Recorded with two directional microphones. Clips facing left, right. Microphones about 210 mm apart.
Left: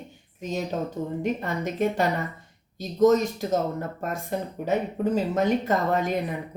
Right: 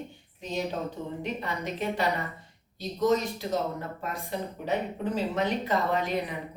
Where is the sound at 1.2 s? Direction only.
45° left (ahead or behind).